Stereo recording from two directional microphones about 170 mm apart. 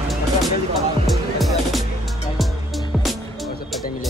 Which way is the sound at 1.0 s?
Centre (ahead or behind).